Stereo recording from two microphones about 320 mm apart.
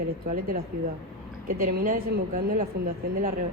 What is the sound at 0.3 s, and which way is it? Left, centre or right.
A woman's voice, right.